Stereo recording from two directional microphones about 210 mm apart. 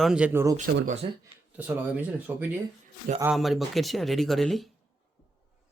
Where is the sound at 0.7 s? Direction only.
50° right (ahead or behind).